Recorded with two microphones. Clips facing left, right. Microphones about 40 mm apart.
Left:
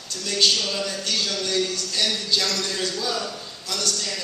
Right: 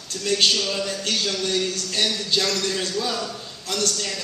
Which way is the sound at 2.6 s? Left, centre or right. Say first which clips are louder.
Right 2 dB; right.